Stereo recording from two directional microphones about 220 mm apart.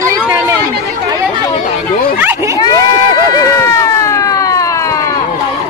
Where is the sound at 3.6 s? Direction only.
15° left (ahead or behind).